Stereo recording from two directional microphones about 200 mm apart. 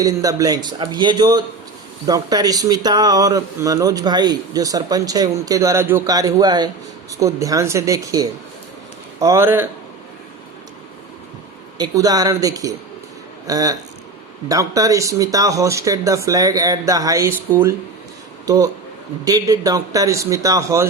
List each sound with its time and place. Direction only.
0.0 s speech: 15° right (ahead or behind)
11.8 s speech: 20° right (ahead or behind)
18.4 s speech: 15° right (ahead or behind)